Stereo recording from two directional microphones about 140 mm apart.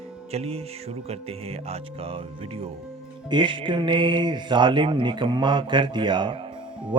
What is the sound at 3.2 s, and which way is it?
Speech, 35° right (ahead or behind).